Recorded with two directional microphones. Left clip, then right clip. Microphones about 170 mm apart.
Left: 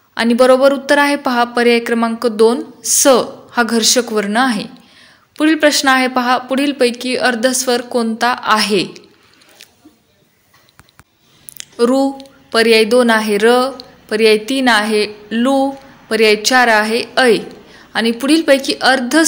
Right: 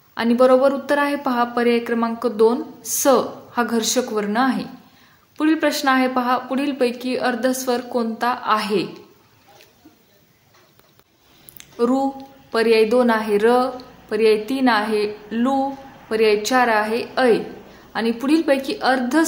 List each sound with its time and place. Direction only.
0.1 s a woman's voice: 25° left (ahead or behind)
11.5 s a sound: 20° left (ahead or behind)
12.5 s a woman's voice: 20° left (ahead or behind)